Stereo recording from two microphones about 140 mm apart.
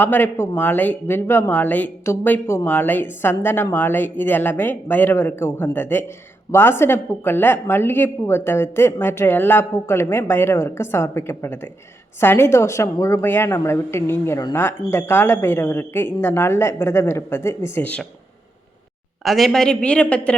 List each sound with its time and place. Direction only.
0.0 s speech: 15° left (ahead or behind)
19.2 s speech: centre (ahead or behind)